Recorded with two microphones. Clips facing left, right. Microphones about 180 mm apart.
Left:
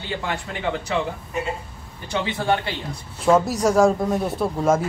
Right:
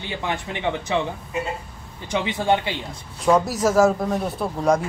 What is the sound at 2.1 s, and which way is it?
Speech, 20° right (ahead or behind).